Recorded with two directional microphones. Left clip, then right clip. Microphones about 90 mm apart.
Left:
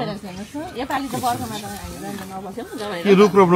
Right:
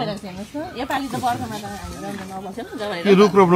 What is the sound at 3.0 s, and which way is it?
Speech, centre (ahead or behind).